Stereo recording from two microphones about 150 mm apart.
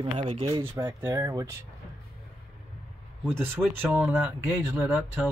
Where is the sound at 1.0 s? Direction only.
15° right (ahead or behind).